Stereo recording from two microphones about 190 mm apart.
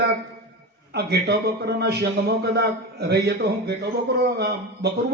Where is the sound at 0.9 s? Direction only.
60° right (ahead or behind).